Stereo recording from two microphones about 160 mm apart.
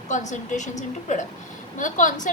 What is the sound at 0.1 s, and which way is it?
Speech, 50° left (ahead or behind).